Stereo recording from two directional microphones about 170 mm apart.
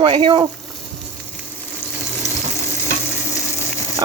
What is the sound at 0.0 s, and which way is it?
Speech, 30° right (ahead or behind).